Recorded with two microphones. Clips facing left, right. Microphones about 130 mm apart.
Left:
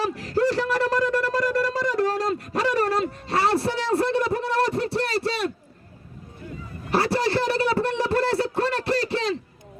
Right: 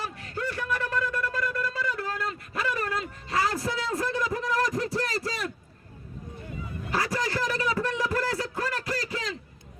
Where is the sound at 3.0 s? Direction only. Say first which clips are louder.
Left 5 dB; 70° left (ahead or behind).